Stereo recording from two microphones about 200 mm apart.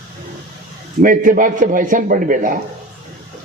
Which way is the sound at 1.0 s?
40° right (ahead or behind).